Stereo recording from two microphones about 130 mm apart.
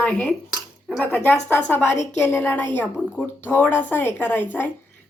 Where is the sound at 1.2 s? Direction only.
15° left (ahead or behind).